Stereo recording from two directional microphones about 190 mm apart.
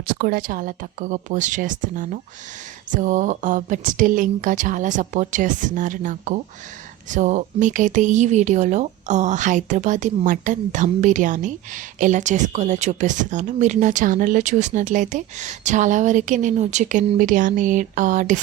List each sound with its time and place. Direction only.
0.0 s speech: 50° right (ahead or behind)